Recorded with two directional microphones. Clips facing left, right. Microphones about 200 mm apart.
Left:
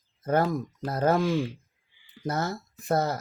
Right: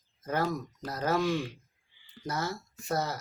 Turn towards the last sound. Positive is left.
turn(degrees=55)  # may be behind; listen again after turning